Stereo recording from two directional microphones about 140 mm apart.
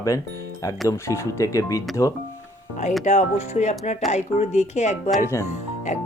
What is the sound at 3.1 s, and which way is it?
Speech, 55° left (ahead or behind).